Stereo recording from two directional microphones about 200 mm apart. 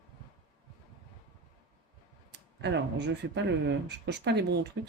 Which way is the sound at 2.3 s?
60° right (ahead or behind).